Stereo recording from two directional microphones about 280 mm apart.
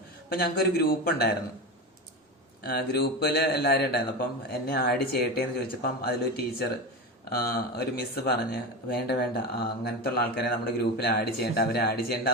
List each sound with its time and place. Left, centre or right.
0.3 s speech: left
2.6 s speech: left